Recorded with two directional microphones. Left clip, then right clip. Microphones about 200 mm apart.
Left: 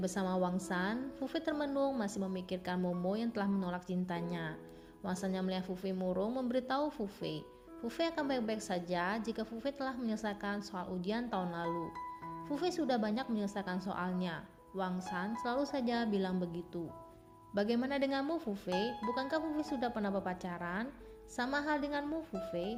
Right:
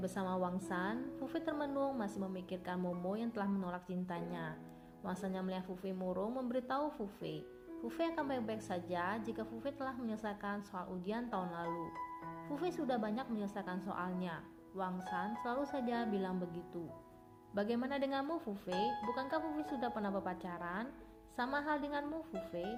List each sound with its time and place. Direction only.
0.0 s a woman's voice: 45° left (ahead or behind)